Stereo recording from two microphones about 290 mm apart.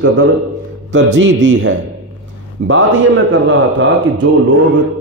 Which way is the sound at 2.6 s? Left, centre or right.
Right.